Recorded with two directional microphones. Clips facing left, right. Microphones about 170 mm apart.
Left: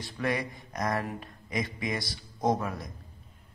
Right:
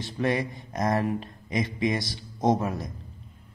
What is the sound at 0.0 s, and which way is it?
A man's voice, 25° right (ahead or behind).